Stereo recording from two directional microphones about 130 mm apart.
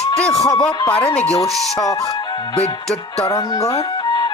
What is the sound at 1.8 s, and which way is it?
Speech, 30° left (ahead or behind).